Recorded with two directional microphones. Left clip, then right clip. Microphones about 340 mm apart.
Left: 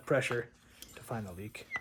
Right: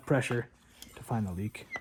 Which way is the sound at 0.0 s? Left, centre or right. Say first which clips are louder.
Even; centre.